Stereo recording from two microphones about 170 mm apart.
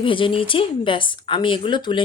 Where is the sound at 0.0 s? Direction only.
30° left (ahead or behind).